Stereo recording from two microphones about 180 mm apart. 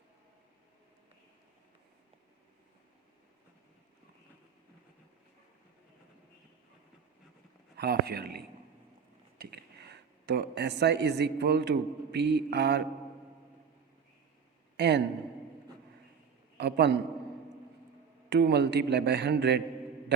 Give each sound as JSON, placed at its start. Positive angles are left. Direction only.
{"t": 7.8, "sound": "speech", "side_deg": -60}
{"t": 9.4, "sound": "speech", "side_deg": -65}
{"t": 14.8, "sound": "a man's voice", "side_deg": -70}
{"t": 16.6, "sound": "a man's voice", "side_deg": -70}
{"t": 18.3, "sound": "a man's voice", "side_deg": -65}